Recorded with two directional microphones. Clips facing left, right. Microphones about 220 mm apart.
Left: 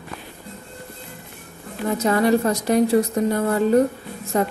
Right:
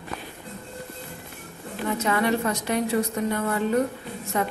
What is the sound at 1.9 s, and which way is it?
Speech, 40° left (ahead or behind).